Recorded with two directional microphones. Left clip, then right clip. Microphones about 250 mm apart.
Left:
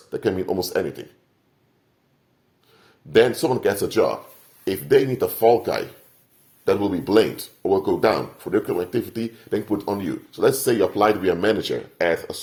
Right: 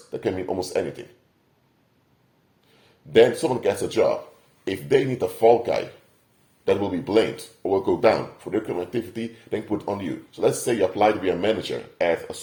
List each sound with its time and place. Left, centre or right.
0.1 s speech: left
2.7 s speech: left